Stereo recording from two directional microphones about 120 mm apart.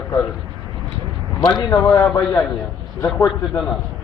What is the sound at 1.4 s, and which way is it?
Speech, 35° left (ahead or behind).